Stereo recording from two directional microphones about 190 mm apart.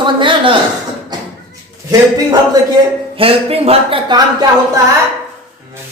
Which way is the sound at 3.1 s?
30° right (ahead or behind).